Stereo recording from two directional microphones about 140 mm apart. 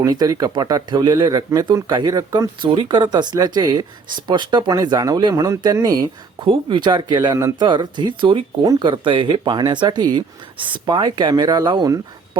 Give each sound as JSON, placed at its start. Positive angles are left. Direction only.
{"t": 0.0, "sound": "speech", "side_deg": -25}